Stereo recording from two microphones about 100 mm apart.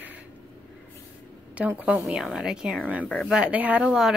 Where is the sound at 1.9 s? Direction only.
Centre (ahead or behind).